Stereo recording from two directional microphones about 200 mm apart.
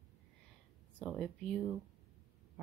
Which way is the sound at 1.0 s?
5° left (ahead or behind).